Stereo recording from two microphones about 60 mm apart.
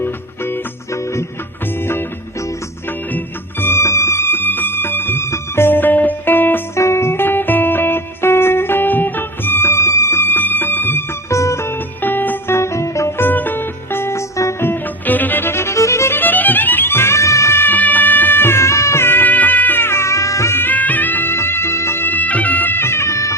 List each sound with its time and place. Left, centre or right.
3.6 s music: left
6.7 s music: left
11.3 s music: left
12.0 s music: left
12.5 s music: left
13.1 s music: left
14.6 s music: left
16.1 s music: left
17.6 s music: left
19.0 s music: left
20.6 s music: left